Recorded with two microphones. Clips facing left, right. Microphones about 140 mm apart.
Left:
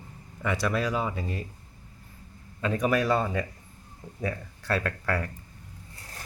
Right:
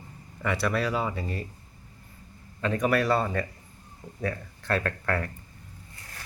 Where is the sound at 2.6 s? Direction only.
5° left (ahead or behind).